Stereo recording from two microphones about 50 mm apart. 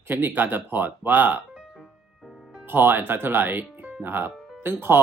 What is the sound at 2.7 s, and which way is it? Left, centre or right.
Speech, right.